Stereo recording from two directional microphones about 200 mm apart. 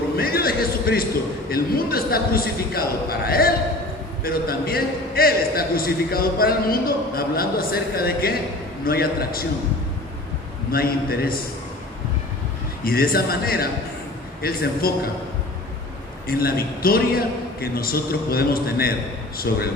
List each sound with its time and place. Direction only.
0.2 s a sound: 50° left (ahead or behind)
1.5 s a man's voice: 50° left (ahead or behind)
10.7 s a man's voice: 50° left (ahead or behind)
12.8 s a man's voice: 50° left (ahead or behind)
16.2 s a man's voice: 50° left (ahead or behind)